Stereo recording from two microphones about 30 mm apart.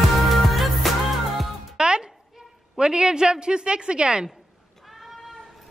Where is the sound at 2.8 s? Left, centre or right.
Right.